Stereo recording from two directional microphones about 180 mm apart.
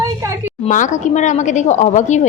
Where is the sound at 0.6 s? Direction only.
45° left (ahead or behind).